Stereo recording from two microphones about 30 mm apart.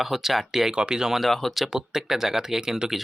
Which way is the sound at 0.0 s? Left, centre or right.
Centre.